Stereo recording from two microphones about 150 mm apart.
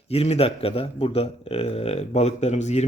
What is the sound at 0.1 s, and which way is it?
Speech, 40° left (ahead or behind).